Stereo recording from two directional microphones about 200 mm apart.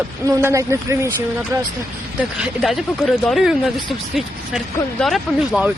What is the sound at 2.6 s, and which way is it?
Speech, centre (ahead or behind).